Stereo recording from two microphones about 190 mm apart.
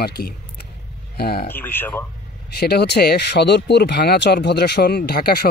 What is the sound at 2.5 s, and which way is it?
Speech, 60° left (ahead or behind).